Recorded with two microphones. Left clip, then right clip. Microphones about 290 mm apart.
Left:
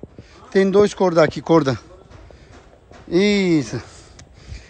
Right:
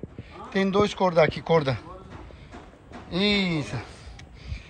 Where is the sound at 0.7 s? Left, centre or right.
Left.